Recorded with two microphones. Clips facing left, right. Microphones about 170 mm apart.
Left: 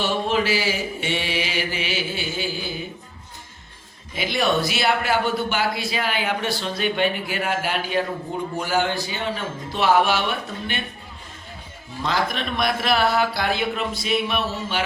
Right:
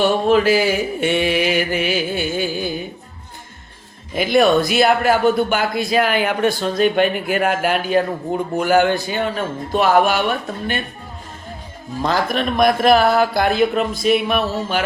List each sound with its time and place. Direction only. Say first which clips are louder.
0.0 s a man's voice: right 8 dB; 50° right (ahead or behind)
4.1 s a man's voice: right 8 dB; 50° right (ahead or behind)
12.0 s a man's voice: right 5 dB; 45° right (ahead or behind)